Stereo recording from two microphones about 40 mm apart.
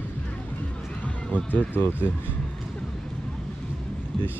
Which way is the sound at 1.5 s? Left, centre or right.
Left.